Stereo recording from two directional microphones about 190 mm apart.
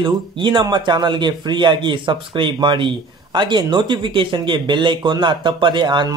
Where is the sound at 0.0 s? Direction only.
25° right (ahead or behind).